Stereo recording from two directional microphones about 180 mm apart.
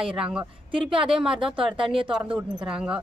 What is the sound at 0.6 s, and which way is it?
Speech, 30° right (ahead or behind).